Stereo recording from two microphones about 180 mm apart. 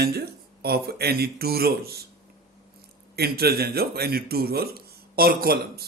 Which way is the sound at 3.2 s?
60° right (ahead or behind).